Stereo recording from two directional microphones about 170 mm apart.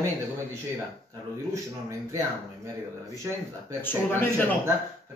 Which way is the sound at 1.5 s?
15° right (ahead or behind).